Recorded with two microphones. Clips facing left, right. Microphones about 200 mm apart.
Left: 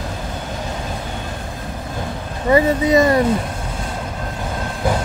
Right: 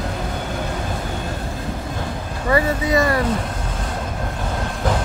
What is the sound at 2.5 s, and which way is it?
Speech, 20° left (ahead or behind).